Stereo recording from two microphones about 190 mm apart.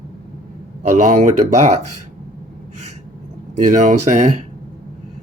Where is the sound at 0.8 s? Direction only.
40° right (ahead or behind).